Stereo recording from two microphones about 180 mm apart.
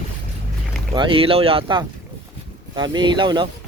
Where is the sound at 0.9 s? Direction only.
25° right (ahead or behind).